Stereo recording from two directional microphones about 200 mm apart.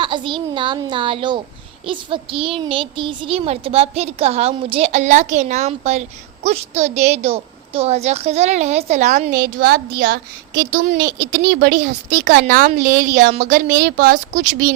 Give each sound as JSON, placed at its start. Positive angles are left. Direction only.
{"t": 0.0, "sound": "a woman's voice", "side_deg": -25}